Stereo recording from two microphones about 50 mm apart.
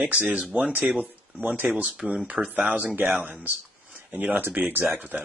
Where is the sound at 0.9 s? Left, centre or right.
Right.